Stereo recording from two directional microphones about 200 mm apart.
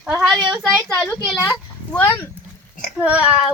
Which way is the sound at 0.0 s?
5° right (ahead or behind).